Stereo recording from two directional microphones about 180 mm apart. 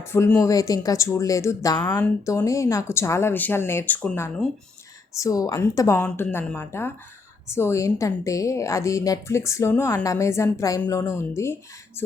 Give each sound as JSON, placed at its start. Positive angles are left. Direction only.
{"t": 0.0, "sound": "a woman's voice", "side_deg": 15}